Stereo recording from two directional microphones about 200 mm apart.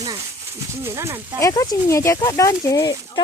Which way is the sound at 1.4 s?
15° left (ahead or behind).